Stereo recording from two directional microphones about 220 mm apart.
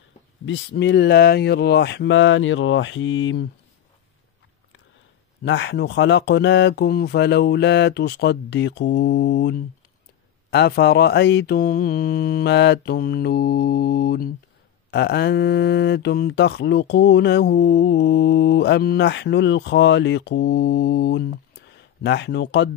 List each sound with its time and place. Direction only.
0.5 s speech: 50° left (ahead or behind)
5.4 s speech: 55° left (ahead or behind)